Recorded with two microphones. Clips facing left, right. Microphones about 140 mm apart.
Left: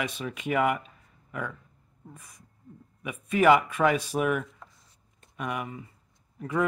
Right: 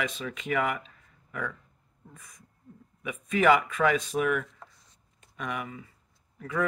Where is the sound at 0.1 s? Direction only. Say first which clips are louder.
Left 2 dB; 10° left (ahead or behind).